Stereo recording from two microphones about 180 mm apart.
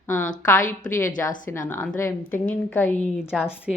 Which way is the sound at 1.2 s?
15° left (ahead or behind).